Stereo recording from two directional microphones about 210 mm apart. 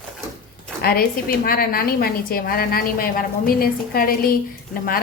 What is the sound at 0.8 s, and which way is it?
A woman's voice, 45° left (ahead or behind).